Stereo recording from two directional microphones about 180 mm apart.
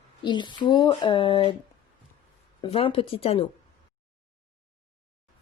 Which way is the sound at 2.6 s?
30° left (ahead or behind).